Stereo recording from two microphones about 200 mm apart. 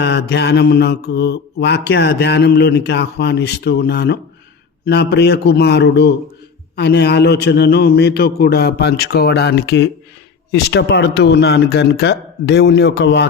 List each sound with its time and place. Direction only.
0.0 s mantra: 60° left (ahead or behind)